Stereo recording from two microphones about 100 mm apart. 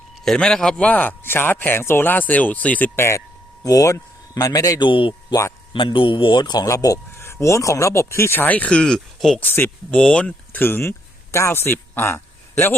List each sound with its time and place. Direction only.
0.3 s a man's voice: 10° left (ahead or behind); by 4.9 s 40° left (ahead or behind)
4.9 s speech: 60° left (ahead or behind)
5.3 s speech: 30° left (ahead or behind)
5.7 s speech: 55° left (ahead or behind)
6.7 s a man's voice: 35° left (ahead or behind); by 9.4 s 5° left (ahead or behind)
9.4 s a man's voice: 20° left (ahead or behind)
9.9 s speech: 10° left (ahead or behind)
10.6 s speech: 20° left (ahead or behind)